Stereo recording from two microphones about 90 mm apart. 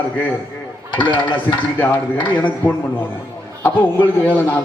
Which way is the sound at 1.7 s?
20° left (ahead or behind).